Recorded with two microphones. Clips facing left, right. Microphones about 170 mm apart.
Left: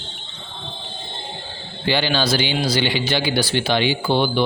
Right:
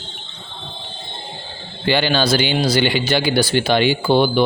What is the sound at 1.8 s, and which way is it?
A man's voice, 55° right (ahead or behind).